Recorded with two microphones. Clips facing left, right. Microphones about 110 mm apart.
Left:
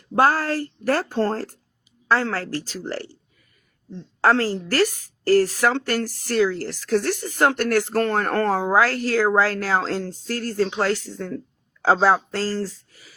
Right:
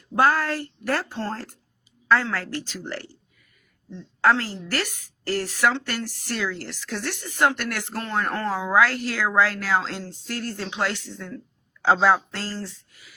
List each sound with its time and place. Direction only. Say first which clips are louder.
0.2 s speech: left 2 dB; 35° left (ahead or behind)